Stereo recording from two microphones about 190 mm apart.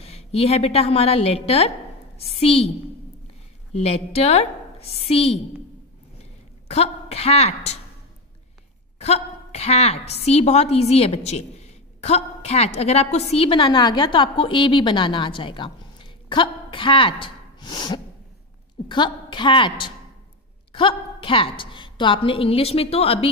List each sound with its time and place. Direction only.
0.0 s a woman's voice: 30° left (ahead or behind)
3.7 s a woman's voice: 30° left (ahead or behind)
6.7 s a woman's voice: 30° left (ahead or behind)
8.9 s a woman's voice: 35° left (ahead or behind)